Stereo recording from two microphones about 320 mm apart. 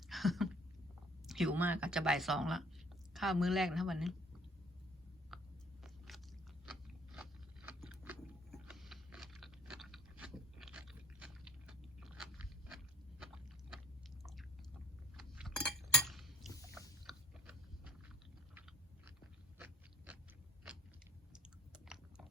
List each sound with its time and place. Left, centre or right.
0.1 s a sound: centre
1.3 s speech: centre
5.3 s chewing: centre
6.1 s biting: centre
6.7 s crunch: centre
7.7 s vehicle: centre
15.1 s cutlery: centre
17.1 s biting: centre
19.5 s a sound: centre
21.3 s chewing: centre